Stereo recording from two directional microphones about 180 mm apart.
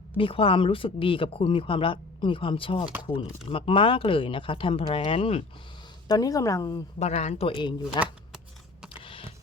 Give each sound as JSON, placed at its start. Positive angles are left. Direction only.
{"t": 0.2, "sound": "speech", "side_deg": 30}
{"t": 6.1, "sound": "speech", "side_deg": 20}
{"t": 7.0, "sound": "speech", "side_deg": 35}